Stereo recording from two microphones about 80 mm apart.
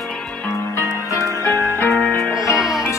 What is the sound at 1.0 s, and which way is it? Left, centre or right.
Music, right.